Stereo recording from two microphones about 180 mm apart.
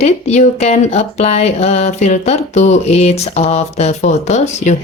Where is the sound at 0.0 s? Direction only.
35° left (ahead or behind).